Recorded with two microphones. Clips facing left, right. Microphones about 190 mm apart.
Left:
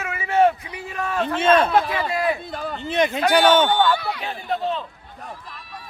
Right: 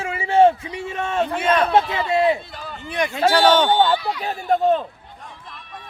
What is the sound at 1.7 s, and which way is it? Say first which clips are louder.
Speech: right 2 dB; 25° right (ahead or behind).